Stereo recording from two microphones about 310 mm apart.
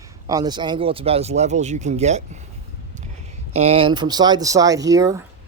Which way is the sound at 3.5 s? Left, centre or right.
Centre.